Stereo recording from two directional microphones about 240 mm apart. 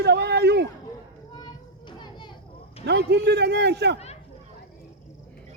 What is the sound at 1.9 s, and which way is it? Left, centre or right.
Children playing, centre.